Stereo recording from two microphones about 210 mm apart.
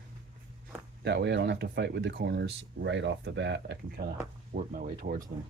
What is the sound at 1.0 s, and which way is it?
Speech, 55° right (ahead or behind).